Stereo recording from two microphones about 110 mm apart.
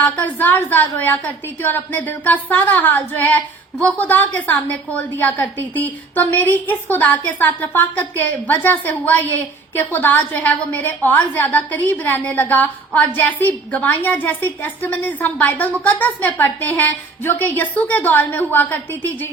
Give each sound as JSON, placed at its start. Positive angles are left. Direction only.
{"t": 0.0, "sound": "a woman's voice", "side_deg": 15}